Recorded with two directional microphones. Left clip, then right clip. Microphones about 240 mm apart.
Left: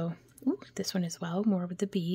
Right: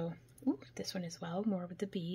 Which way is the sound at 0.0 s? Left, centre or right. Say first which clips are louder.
Left 4 dB; left.